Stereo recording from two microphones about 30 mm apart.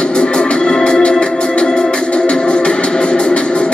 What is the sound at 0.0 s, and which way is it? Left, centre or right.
Music, left.